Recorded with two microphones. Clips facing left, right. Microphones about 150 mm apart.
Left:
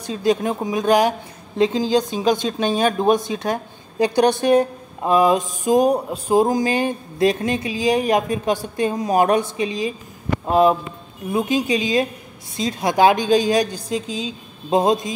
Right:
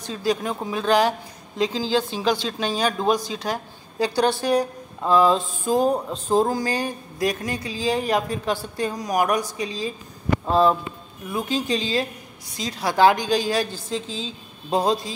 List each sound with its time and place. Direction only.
0.2 s a woman's voice: 20° left (ahead or behind)